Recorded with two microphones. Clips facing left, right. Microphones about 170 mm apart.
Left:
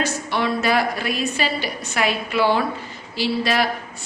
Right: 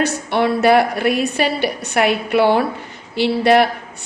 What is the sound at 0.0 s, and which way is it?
A woman's voice, 60° right (ahead or behind).